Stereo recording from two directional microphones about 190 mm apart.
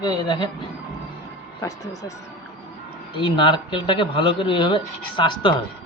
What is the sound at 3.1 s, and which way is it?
Speech, 25° left (ahead or behind).